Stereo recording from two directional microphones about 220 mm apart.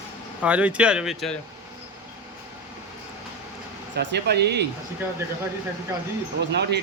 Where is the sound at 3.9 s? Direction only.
50° right (ahead or behind).